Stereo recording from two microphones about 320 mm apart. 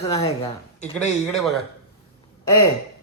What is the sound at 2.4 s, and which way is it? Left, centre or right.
Speech, centre.